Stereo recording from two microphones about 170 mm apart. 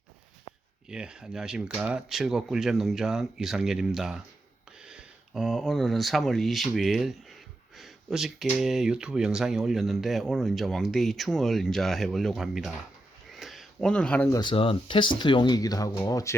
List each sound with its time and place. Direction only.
0.9 s speech: 5° right (ahead or behind)
13.3 s a sound: centre (ahead or behind)
14.3 s speech: 30° left (ahead or behind)